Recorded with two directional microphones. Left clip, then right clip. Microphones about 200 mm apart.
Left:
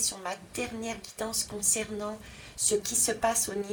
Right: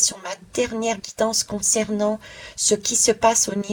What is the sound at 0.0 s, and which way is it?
Speech, 40° right (ahead or behind).